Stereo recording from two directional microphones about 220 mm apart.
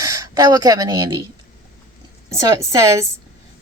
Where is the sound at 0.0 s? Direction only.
15° right (ahead or behind).